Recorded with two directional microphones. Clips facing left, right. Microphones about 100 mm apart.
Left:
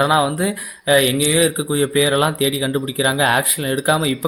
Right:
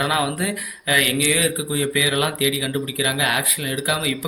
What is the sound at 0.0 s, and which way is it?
Speech, 25° left (ahead or behind).